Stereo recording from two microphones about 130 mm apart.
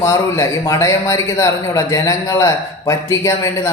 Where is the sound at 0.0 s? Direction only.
25° left (ahead or behind).